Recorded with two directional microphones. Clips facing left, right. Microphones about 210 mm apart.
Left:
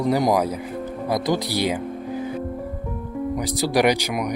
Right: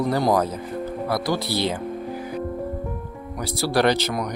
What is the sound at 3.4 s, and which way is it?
Speech, 15° left (ahead or behind).